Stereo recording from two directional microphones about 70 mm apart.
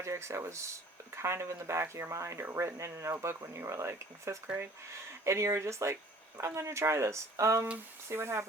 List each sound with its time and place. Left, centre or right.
0.0 s speech: right